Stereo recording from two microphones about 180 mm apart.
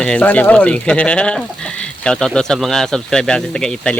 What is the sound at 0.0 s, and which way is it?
Speech, 5° left (ahead or behind).